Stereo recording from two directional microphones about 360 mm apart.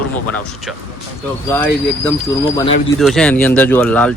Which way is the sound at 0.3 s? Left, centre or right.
Centre.